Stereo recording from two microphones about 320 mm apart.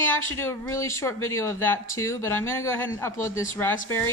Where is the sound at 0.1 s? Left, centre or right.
Centre.